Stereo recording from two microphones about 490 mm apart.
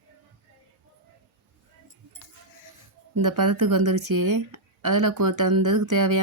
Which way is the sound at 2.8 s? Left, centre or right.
Right.